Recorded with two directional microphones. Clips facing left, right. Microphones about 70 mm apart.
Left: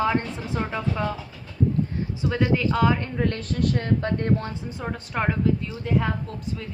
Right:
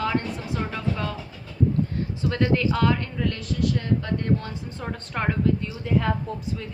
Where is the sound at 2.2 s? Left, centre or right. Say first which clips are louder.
Even; centre.